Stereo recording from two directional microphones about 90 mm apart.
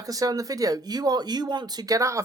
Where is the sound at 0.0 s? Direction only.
40° right (ahead or behind).